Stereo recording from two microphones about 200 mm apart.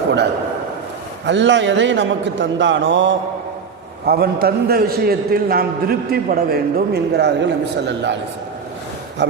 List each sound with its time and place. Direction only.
1.2 s a man's voice: 60° right (ahead or behind)
4.0 s a man's voice: 50° right (ahead or behind)
9.2 s speech: 60° right (ahead or behind)